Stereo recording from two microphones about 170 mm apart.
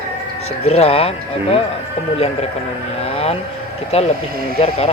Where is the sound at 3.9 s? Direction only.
40° left (ahead or behind).